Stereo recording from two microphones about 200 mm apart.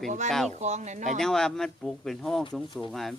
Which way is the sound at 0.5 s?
35° right (ahead or behind).